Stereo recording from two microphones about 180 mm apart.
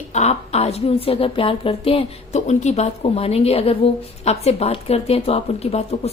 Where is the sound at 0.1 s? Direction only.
40° left (ahead or behind).